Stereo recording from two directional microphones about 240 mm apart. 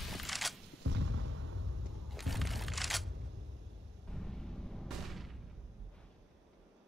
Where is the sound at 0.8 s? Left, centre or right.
Right.